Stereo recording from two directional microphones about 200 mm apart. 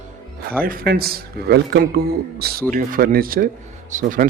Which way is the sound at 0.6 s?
45° right (ahead or behind).